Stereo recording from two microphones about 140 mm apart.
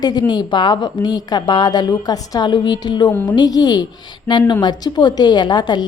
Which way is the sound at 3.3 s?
30° left (ahead or behind).